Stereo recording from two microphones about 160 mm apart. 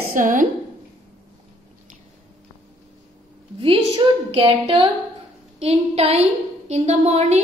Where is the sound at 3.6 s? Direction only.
35° right (ahead or behind).